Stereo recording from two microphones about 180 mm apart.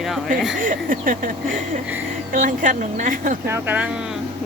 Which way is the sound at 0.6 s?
50° right (ahead or behind).